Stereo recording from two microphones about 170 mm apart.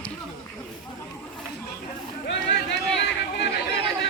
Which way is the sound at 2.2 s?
90° left.